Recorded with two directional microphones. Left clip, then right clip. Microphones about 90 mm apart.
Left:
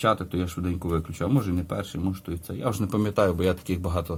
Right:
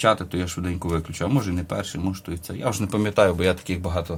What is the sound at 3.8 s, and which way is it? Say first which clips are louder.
Speech: right 3 dB; 45° left (ahead or behind).